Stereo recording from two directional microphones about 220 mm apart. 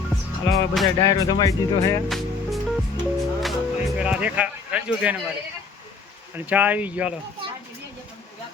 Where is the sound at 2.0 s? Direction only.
Centre (ahead or behind).